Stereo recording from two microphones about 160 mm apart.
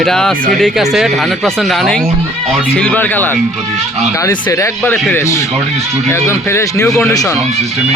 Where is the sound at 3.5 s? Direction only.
Centre (ahead or behind).